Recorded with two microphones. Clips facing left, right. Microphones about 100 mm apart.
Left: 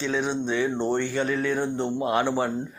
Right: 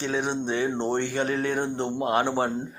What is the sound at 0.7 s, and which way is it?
Speech, 20° right (ahead or behind).